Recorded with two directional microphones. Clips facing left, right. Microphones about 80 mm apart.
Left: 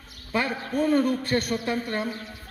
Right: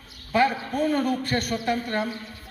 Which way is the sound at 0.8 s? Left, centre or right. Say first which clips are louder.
Left 2 dB; left.